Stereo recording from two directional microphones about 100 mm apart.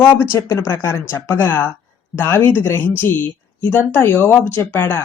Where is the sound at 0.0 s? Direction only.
25° left (ahead or behind).